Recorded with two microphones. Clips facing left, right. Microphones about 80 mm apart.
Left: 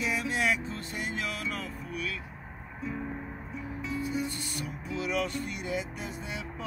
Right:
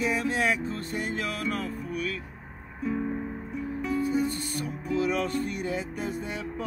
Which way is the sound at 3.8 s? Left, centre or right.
Right.